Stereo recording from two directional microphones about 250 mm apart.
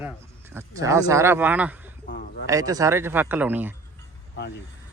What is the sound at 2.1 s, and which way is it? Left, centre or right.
Speech, left.